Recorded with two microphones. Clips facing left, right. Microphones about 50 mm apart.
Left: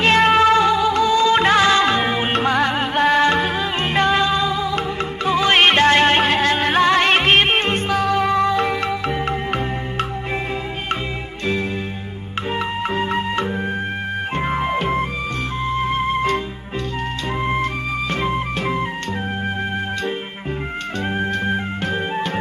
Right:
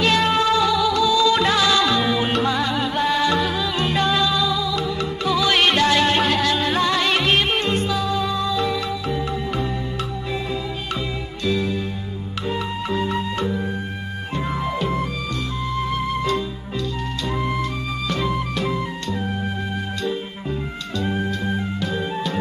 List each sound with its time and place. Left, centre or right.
0.0 s music: left
11.4 s music: left
17.4 s music: left
21.0 s music: left